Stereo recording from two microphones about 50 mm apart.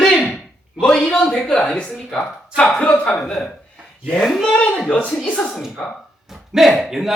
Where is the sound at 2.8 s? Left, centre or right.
Left.